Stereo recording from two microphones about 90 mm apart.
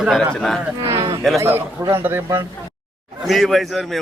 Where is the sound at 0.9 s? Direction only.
65° right (ahead or behind).